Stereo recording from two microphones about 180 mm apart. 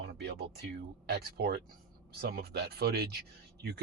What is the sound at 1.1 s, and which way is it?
Speech, 65° right (ahead or behind).